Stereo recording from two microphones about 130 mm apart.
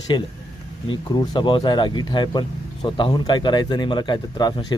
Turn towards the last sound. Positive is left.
turn(degrees=35)  # may be behind; listen again after turning